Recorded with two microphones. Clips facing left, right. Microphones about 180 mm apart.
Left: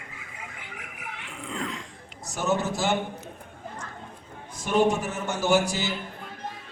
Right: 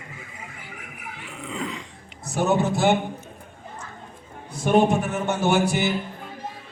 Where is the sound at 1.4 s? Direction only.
5° right (ahead or behind).